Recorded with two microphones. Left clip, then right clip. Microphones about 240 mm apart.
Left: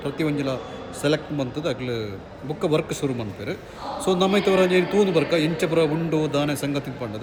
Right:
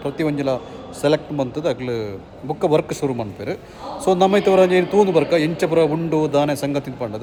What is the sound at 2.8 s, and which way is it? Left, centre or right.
Speech, centre.